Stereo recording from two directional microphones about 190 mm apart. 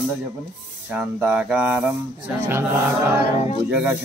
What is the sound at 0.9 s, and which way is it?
Speech, 10° right (ahead or behind).